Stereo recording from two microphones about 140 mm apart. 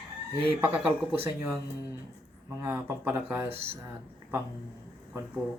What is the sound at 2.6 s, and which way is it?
Speech, 15° right (ahead or behind).